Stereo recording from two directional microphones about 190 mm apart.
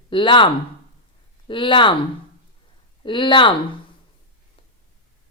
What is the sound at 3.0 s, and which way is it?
Speech, 25° left (ahead or behind).